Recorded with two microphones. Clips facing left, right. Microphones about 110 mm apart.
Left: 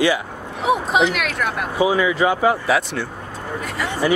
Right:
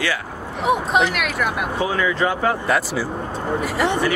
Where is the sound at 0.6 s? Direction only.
Centre (ahead or behind).